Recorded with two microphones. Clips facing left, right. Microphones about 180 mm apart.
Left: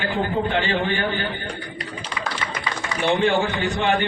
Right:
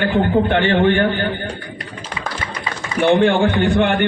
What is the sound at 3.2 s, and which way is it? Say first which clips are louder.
Speech: right 6 dB; 55° right (ahead or behind).